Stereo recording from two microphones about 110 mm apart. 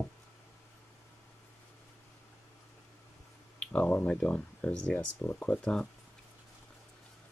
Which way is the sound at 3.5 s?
10° left (ahead or behind).